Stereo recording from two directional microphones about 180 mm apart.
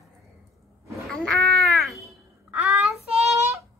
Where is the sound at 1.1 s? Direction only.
5° left (ahead or behind).